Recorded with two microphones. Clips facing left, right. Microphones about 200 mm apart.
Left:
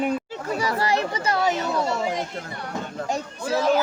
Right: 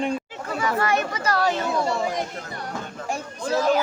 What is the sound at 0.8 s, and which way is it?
Speech, 30° left (ahead or behind).